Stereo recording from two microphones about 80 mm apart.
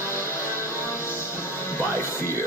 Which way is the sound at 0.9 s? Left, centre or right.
Left.